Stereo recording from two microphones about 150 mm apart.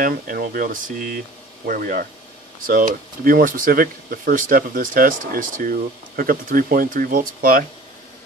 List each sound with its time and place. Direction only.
0.0 s speech: 80° right